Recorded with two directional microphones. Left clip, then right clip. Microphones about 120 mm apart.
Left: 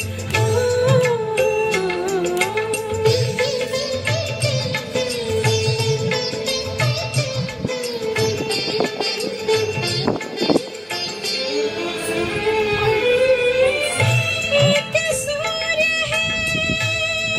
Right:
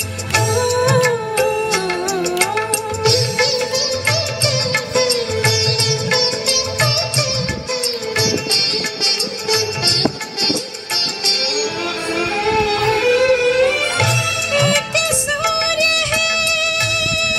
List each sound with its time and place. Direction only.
0.3 s music: 25° right (ahead or behind)
2.3 s music of bollywood: 25° right (ahead or behind)
8.2 s music: 25° right (ahead or behind)